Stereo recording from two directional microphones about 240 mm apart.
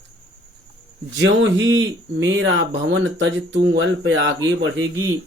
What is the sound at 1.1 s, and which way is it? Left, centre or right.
Speech, right.